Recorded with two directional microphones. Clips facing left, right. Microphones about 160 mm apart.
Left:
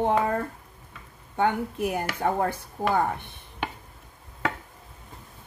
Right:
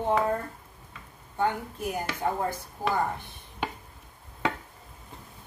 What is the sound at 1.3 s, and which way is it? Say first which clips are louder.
A woman's voice: left 4 dB; 65° left (ahead or behind).